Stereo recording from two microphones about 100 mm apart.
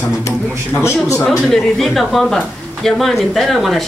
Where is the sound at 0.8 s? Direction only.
30° left (ahead or behind).